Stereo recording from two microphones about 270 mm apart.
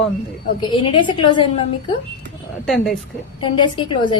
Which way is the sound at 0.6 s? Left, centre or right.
Centre.